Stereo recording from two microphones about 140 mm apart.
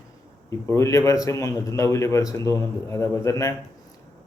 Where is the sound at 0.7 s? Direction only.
20° left (ahead or behind).